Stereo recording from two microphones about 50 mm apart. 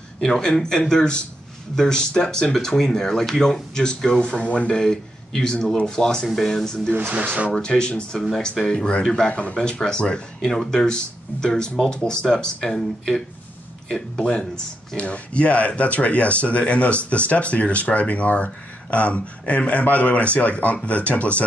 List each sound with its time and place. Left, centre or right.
0.2 s speech: centre
4.7 s a man's voice: centre
6.2 s speech: centre
6.9 s speech: right
7.5 s speech: centre
9.3 s speech: left
9.6 s speech: centre
15.0 s speech: left